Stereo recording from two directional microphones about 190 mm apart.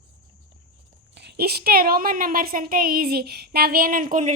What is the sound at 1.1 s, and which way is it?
A woman's voice, 60° right (ahead or behind).